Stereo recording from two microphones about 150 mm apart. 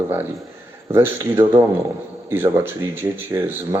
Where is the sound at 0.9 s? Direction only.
15° right (ahead or behind).